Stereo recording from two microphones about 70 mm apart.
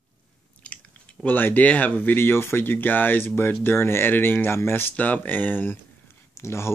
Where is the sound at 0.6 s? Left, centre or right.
Centre.